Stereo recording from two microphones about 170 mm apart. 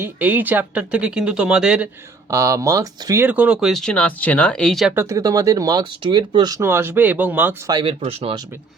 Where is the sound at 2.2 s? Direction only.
15° right (ahead or behind); by 4.9 s centre (ahead or behind).